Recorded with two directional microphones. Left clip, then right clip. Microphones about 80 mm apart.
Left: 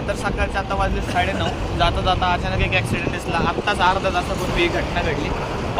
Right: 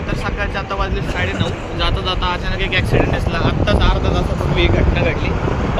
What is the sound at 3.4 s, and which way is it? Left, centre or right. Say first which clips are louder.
Speech: left 1 dB; left.